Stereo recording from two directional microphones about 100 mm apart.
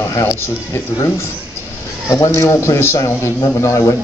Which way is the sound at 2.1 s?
30° left (ahead or behind).